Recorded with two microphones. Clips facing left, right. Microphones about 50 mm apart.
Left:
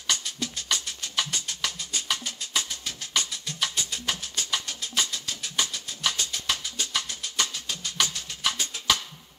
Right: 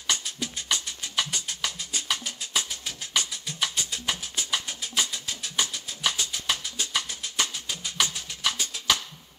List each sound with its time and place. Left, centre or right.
0.7 s music: centre
8.4 s music: centre